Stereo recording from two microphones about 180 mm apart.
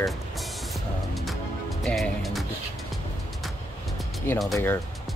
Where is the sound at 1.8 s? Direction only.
Centre (ahead or behind).